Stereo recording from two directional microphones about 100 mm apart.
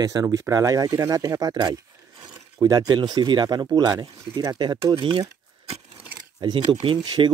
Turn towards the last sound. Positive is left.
turn(degrees=-50)  # may be behind; listen again after turning